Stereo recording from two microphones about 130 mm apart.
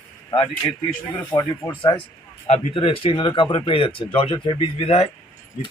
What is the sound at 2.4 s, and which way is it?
Speech, 50° left (ahead or behind).